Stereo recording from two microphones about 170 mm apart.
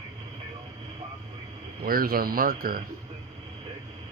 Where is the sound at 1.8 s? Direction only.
60° right (ahead or behind).